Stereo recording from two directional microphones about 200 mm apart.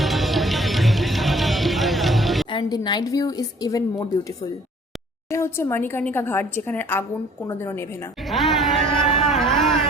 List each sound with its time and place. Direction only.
0.0 s music: centre (ahead or behind)
2.5 s a woman's voice: 20° left (ahead or behind)
5.3 s a woman's voice: 15° left (ahead or behind)
8.3 s music: centre (ahead or behind)
9.3 s carnatic music: centre (ahead or behind)